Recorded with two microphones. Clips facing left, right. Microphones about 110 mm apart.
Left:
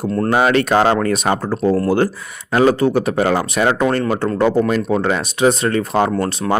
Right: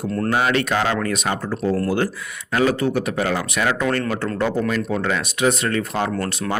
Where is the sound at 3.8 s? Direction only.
25° left (ahead or behind).